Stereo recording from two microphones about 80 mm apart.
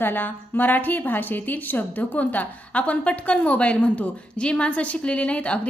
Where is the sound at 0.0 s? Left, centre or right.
Left.